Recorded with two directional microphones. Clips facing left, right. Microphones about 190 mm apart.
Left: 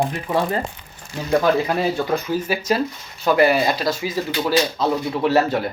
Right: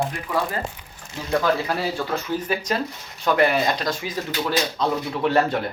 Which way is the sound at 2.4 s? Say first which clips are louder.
Left 4 dB; 5° left (ahead or behind).